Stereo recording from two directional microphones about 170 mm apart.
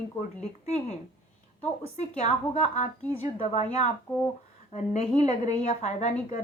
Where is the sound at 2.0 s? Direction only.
40° left (ahead or behind).